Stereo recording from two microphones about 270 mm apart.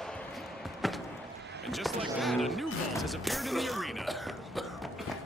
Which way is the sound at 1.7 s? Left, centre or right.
Centre.